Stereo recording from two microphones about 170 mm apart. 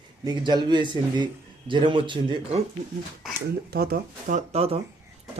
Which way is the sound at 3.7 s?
60° right (ahead or behind).